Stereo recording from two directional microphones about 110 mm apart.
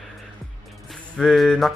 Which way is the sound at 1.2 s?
5° left (ahead or behind).